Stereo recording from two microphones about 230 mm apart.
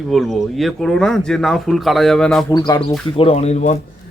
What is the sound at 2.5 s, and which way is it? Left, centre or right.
Speech, centre.